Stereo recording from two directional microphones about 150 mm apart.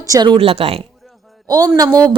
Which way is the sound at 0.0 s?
25° right (ahead or behind).